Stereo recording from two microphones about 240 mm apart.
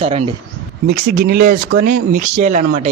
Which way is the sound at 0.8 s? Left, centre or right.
Right.